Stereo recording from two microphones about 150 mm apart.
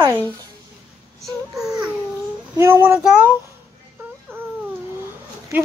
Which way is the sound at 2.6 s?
15° right (ahead or behind).